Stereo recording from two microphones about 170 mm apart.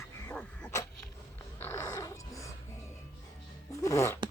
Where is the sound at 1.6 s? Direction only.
15° left (ahead or behind).